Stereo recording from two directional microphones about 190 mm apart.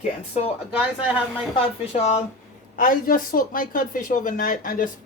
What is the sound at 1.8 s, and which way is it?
Speech, 30° left (ahead or behind).